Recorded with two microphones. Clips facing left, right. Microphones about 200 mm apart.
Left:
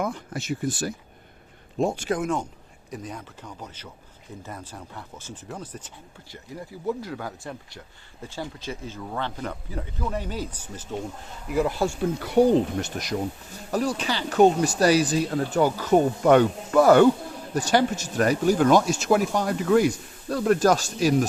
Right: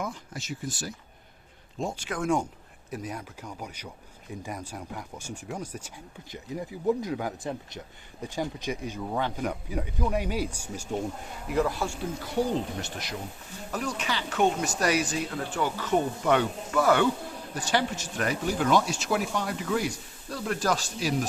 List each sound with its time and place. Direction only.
0.0 s speech: 60° left (ahead or behind)
2.9 s speech: 10° right (ahead or behind)
11.8 s speech: 35° left (ahead or behind)
12.3 s speech: 60° left (ahead or behind)
13.7 s speech: 35° left (ahead or behind)